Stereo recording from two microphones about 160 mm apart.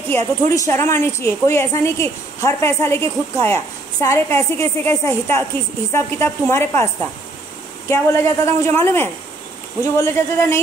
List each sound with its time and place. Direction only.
0.1 s a woman's voice: 15° left (ahead or behind)
7.9 s a woman's voice: 20° left (ahead or behind)